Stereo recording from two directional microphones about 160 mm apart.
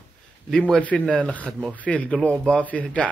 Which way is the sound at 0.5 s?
5° left (ahead or behind).